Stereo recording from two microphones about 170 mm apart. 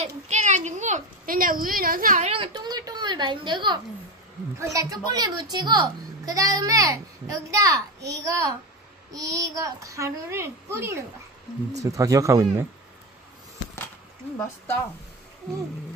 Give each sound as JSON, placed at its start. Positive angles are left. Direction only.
{"t": 0.0, "sound": "a child's voice", "side_deg": -45}
{"t": 2.2, "sound": "a child's voice", "side_deg": -30}